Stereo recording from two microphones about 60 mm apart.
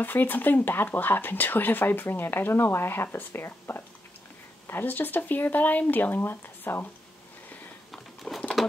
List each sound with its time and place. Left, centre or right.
0.0 s speech: left
7.9 s a sound: centre
8.6 s bird: centre